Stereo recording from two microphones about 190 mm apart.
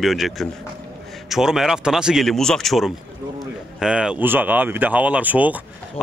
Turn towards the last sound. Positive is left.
turn(degrees=-10)  # may be behind; listen again after turning